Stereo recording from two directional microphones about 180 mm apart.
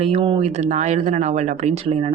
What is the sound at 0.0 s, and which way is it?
Speech, 30° right (ahead or behind).